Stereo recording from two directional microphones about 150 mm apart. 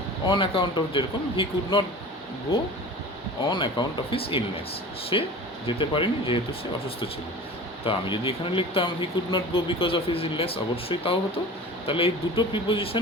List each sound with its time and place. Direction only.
0.3 s speech: 35° left (ahead or behind)
3.5 s speech: 30° left (ahead or behind)
7.9 s speech: 35° left (ahead or behind)